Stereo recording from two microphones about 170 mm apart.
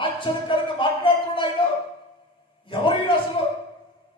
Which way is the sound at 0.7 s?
30° left (ahead or behind).